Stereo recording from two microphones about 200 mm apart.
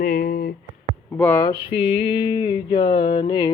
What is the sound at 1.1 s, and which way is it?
Speech, 15° left (ahead or behind).